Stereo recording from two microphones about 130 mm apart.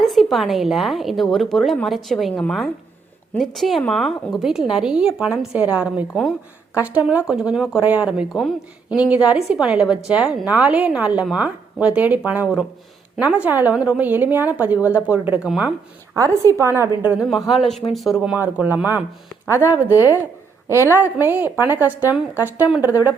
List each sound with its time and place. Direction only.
0.0 s a woman's voice: centre (ahead or behind)
16.1 s a woman's voice: 25° right (ahead or behind)